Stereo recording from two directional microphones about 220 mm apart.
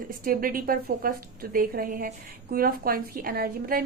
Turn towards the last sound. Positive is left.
turn(degrees=-45)  # may be behind; listen again after turning